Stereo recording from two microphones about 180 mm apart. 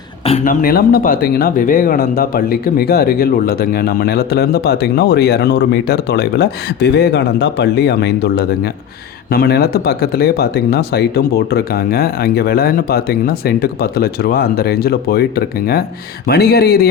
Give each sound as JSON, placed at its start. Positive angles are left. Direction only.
{"t": 0.4, "sound": "speech", "side_deg": 55}